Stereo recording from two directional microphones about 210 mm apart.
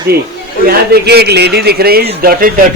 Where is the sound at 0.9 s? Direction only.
50° right (ahead or behind).